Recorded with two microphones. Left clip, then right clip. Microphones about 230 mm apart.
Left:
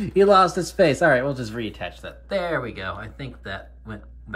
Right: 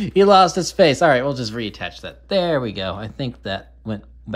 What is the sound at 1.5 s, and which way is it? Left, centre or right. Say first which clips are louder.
Speech: right 3 dB; centre.